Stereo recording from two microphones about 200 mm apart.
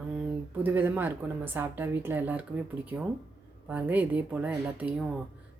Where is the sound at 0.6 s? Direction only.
10° right (ahead or behind).